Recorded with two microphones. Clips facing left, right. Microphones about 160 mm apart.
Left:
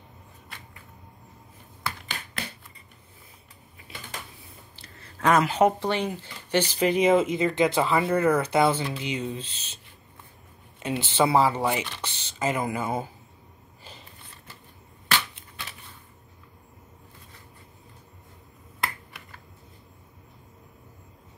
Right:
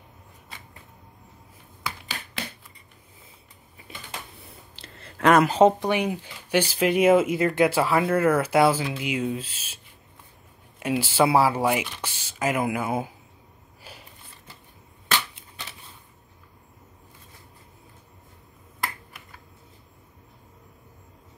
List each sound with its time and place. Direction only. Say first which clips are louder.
1.8 s finger snapping: even; centre (ahead or behind)
4.4 s a sound: right 2 dB; 70° right (ahead or behind)
5.5 s speech: right 4 dB; 25° right (ahead or behind)
5.8 s speech: right 2 dB; 10° right (ahead or behind)
10.8 s speech: right 2 dB; 10° right (ahead or behind)